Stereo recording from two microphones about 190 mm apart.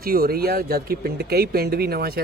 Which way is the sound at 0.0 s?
50° right (ahead or behind).